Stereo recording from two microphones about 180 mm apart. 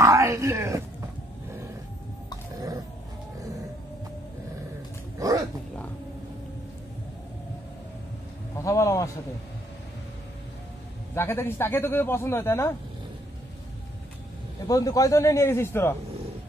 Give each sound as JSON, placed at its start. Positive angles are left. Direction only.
{"t": 0.0, "sound": "groan", "side_deg": -15}
{"t": 8.5, "sound": "a sound", "side_deg": 15}
{"t": 11.1, "sound": "speech", "side_deg": 15}
{"t": 14.7, "sound": "speech", "side_deg": 20}